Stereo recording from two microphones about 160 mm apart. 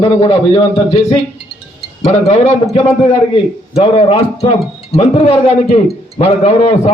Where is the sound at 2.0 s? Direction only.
45° left (ahead or behind).